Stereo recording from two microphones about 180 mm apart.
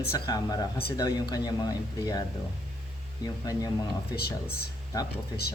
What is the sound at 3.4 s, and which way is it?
Speech, 20° left (ahead or behind).